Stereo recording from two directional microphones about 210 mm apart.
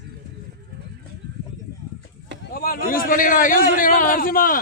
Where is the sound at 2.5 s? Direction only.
45° left (ahead or behind).